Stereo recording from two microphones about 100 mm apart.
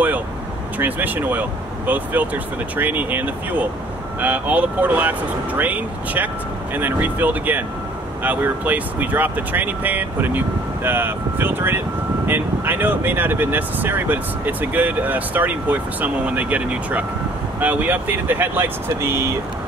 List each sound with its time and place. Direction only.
0.7 s speech: 15° right (ahead or behind)